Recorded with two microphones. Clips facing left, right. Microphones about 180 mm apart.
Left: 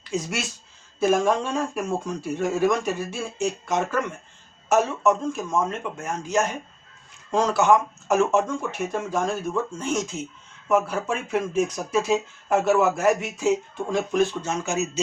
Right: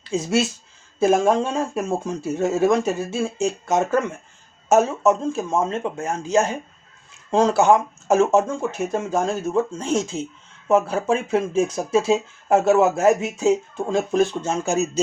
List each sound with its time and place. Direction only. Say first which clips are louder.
0.1 s speech: right 7 dB; 30° right (ahead or behind)
4.7 s speech: right 4 dB; 30° right (ahead or behind)